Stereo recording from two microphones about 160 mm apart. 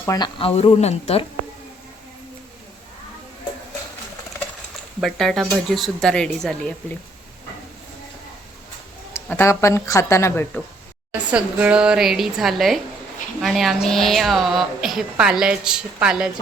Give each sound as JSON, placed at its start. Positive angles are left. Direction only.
{"t": 0.0, "sound": "speech", "side_deg": 20}
{"t": 0.3, "sound": "speech", "side_deg": 35}
{"t": 4.9, "sound": "a woman's voice", "side_deg": 0}
{"t": 9.1, "sound": "speech", "side_deg": 15}
{"t": 11.3, "sound": "a woman's voice", "side_deg": -5}